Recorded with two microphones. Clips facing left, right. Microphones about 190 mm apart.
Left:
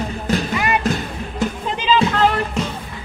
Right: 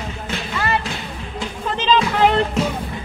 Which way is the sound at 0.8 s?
45° left (ahead or behind).